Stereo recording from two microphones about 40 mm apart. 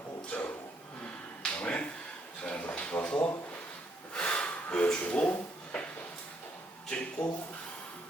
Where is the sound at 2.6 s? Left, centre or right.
Left.